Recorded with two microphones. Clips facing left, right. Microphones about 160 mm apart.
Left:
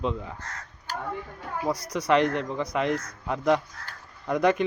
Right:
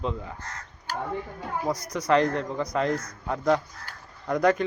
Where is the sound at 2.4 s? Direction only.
20° left (ahead or behind).